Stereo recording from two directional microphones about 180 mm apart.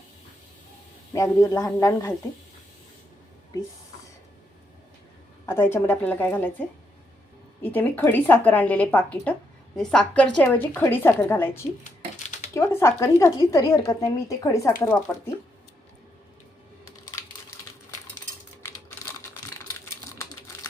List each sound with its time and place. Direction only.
1.1 s a woman's voice: 15° left (ahead or behind)
5.5 s a woman's voice: 15° left (ahead or behind)